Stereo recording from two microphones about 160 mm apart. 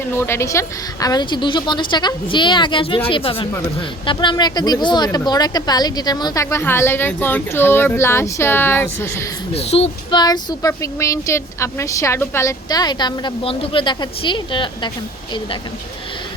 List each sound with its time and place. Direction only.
0.1 s a woman's voice: 15° left (ahead or behind)
9.6 s speech: 40° left (ahead or behind)